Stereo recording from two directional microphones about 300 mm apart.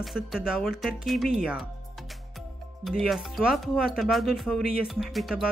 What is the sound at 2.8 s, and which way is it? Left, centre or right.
Speech, centre.